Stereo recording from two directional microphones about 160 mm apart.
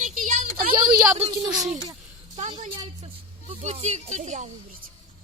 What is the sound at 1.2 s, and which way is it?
Speech, 25° right (ahead or behind).